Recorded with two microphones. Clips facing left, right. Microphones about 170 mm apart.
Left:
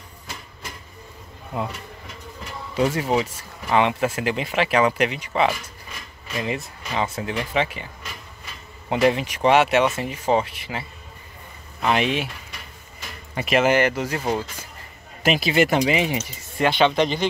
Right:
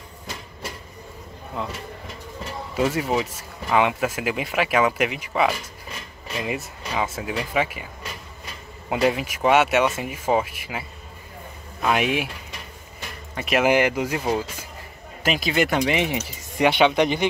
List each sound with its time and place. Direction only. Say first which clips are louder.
2.7 s speech: left 1 dB; centre (ahead or behind)
8.8 s speech: left 2 dB; 5° right (ahead or behind)
13.3 s speech: left 2 dB; 5° left (ahead or behind)
13.6 s speech: even; 10° right (ahead or behind)
16.5 s speech: right 1 dB; 15° right (ahead or behind)